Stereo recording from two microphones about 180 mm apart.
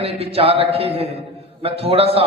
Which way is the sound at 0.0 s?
35° right (ahead or behind).